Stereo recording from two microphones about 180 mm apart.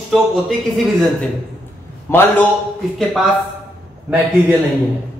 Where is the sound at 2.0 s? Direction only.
15° left (ahead or behind).